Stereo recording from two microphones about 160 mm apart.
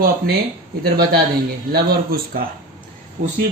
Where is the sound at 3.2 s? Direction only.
60° right (ahead or behind).